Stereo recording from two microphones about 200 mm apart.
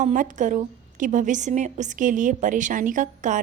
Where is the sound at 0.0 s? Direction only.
40° right (ahead or behind).